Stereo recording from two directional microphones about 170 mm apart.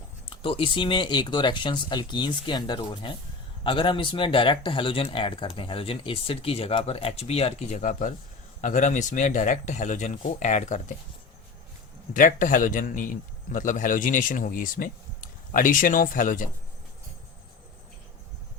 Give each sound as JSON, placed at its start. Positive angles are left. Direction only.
{"t": 0.3, "sound": "a man's voice", "side_deg": 30}
{"t": 12.1, "sound": "a man's voice", "side_deg": 50}